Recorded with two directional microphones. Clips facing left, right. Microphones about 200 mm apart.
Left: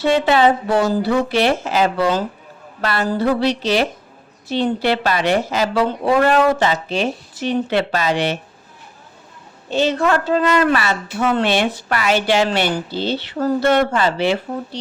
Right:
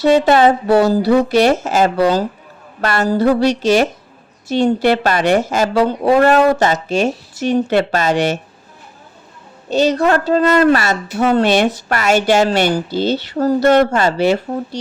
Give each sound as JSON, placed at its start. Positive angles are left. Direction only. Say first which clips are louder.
{"t": 0.0, "sound": "a woman's voice", "louder": "right 4 dB", "side_deg": -40}
{"t": 9.6, "sound": "a woman's voice", "louder": "right 3 dB", "side_deg": -40}